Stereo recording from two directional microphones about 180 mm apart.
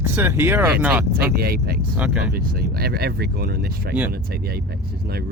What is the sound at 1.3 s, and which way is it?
Speech, 60° right (ahead or behind).